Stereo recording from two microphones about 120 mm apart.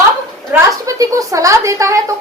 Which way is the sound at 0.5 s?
30° right (ahead or behind).